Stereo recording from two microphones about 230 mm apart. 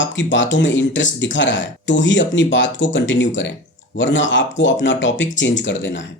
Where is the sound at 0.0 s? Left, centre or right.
Left.